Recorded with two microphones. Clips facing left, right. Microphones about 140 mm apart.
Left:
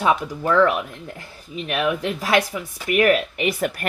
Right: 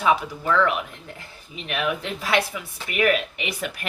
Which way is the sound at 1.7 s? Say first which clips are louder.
Left 4 dB; 45° left (ahead or behind).